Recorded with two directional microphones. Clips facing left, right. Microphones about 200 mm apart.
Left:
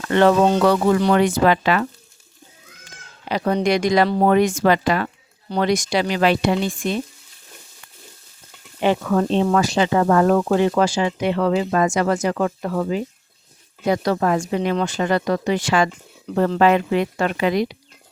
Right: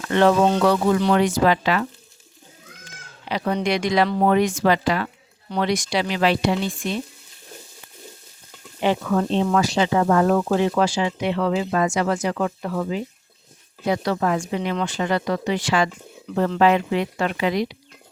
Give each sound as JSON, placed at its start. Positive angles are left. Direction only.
{"t": 0.1, "sound": "speech", "side_deg": 55}
{"t": 3.2, "sound": "speech", "side_deg": 45}
{"t": 4.3, "sound": "speech", "side_deg": 50}
{"t": 8.8, "sound": "speech", "side_deg": 50}